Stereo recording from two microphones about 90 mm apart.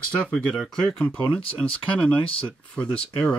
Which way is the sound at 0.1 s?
10° left (ahead or behind).